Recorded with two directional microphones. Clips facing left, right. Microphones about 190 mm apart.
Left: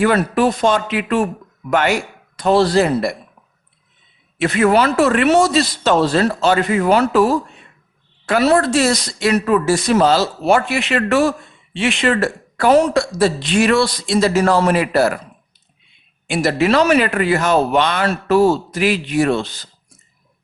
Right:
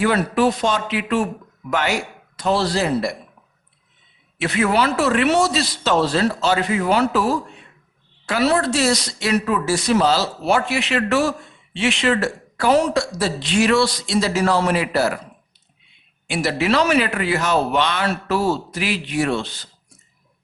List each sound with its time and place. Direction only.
0.0 s speech: 50° left (ahead or behind)
2.3 s speech: 50° left (ahead or behind)
4.4 s speech: 50° left (ahead or behind)
8.3 s speech: 50° left (ahead or behind)
16.2 s speech: 45° left (ahead or behind)